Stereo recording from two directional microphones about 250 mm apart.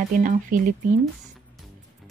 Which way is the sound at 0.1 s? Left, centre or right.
Right.